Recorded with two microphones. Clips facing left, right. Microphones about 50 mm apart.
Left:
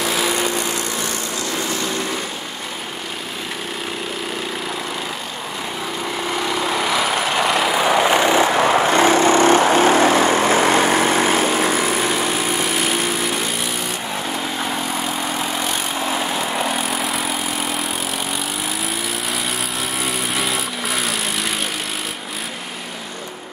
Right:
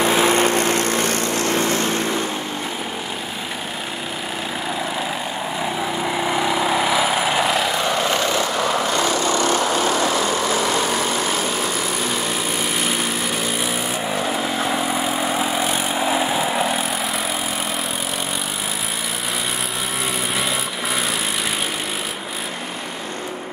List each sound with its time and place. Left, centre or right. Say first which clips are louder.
0.4 s vehicle: right 4 dB; right
5.8 s vehicle: right 1 dB; centre
7.8 s vehicle: left 5 dB; left
8.5 s vehicle: left 5 dB; left
14.1 s vehicle: right 3 dB; centre
20.3 s vehicle: left 1 dB; centre